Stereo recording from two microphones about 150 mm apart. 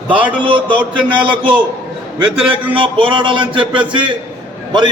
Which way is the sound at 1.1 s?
35° right (ahead or behind).